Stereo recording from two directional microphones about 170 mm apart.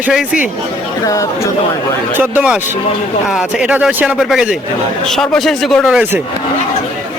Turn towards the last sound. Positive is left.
turn(degrees=-5)  # may be behind; listen again after turning